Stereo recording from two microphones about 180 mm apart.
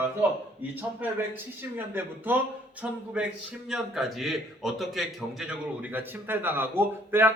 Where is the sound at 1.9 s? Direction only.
10° right (ahead or behind).